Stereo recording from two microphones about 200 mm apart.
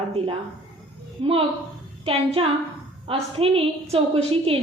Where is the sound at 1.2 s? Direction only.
30° right (ahead or behind).